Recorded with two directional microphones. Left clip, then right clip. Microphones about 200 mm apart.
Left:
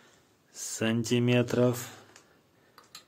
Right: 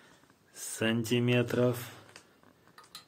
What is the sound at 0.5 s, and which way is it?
Speech, 25° left (ahead or behind).